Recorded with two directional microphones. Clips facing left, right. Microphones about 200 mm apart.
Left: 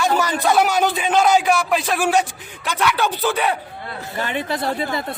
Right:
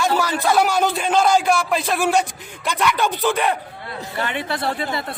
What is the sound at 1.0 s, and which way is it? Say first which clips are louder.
Speech: left 1 dB; centre (ahead or behind).